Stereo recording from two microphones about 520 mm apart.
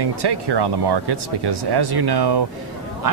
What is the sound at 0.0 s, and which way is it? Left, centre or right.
Speech, right.